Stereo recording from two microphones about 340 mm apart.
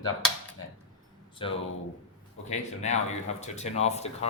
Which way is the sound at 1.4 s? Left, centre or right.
Centre.